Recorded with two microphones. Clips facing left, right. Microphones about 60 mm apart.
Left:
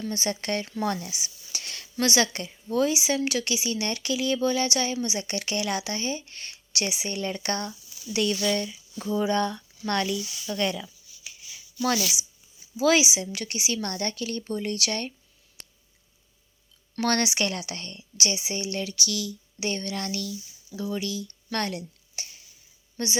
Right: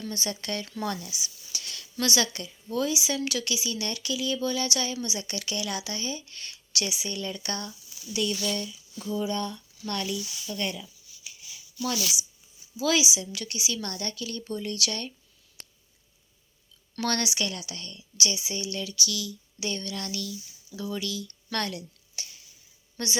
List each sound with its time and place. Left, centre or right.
0.2 s speech: left
8.5 s speech: left
9.0 s speech: left
9.2 s speech: left
10.8 s shuffling cards: left
11.8 s speech: left
12.7 s speech: left
17.1 s speech: left
18.2 s speech: left
20.7 s speech: left
23.0 s a woman's voice: centre